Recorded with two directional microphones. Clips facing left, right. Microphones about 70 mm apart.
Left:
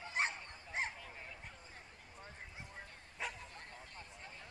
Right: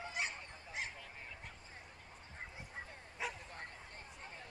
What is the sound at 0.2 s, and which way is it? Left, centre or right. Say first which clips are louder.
Dog: left 5 dB; left.